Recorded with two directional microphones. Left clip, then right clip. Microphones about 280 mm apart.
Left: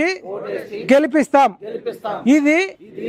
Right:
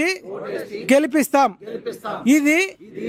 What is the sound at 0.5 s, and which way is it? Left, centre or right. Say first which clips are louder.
Speech: left 2 dB; centre.